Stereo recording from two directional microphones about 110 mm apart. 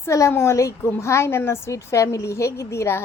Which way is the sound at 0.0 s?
25° left (ahead or behind).